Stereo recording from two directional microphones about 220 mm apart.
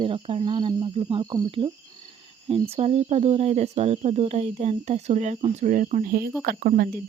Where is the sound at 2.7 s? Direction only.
30° right (ahead or behind).